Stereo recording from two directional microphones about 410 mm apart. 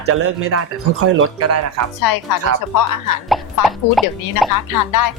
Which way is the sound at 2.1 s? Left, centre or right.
Left.